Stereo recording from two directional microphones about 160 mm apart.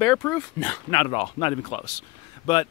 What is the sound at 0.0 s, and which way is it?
Speech, 10° left (ahead or behind).